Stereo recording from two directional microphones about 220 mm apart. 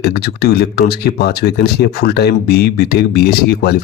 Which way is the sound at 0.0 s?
45° left (ahead or behind).